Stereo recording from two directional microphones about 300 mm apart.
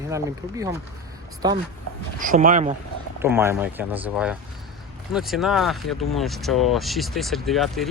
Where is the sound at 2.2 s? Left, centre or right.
Right.